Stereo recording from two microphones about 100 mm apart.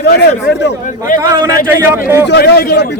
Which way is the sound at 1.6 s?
25° right (ahead or behind).